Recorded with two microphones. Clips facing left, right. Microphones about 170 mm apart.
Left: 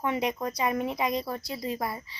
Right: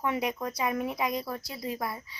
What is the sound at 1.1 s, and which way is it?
Speech, 25° left (ahead or behind).